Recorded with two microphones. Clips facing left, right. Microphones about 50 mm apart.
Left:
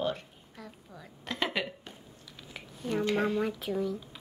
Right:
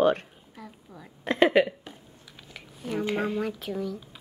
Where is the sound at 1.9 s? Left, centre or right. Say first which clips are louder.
Right 2 dB; centre.